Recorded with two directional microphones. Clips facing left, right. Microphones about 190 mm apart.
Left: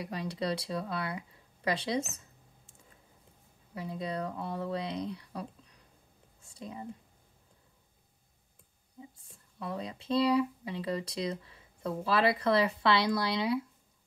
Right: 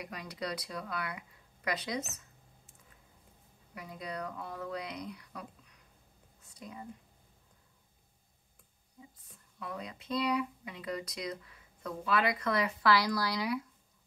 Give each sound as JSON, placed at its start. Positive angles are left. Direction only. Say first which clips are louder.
{"t": 0.0, "sound": "speech", "louder": "left 5 dB", "side_deg": 30}
{"t": 3.7, "sound": "speech", "louder": "left 5 dB", "side_deg": 30}
{"t": 6.4, "sound": "a sound", "louder": "left 4 dB", "side_deg": 25}
{"t": 9.6, "sound": "speech", "louder": "left 4 dB", "side_deg": 30}